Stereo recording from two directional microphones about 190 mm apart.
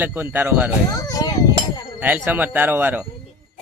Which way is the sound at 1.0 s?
20° left (ahead or behind).